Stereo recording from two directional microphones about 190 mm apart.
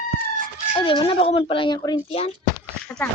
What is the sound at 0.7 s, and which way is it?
Speech, 25° left (ahead or behind).